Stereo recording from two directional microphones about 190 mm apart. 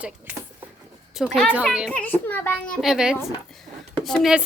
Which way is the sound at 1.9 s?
10° left (ahead or behind).